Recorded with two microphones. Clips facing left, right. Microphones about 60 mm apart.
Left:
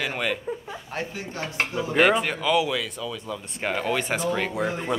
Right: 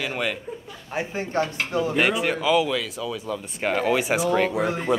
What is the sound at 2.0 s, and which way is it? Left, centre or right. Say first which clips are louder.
Speech: left 5 dB; centre.